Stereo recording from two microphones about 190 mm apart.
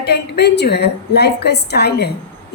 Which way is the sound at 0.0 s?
60° left (ahead or behind).